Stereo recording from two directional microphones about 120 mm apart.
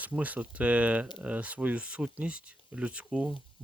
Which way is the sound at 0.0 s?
15° right (ahead or behind).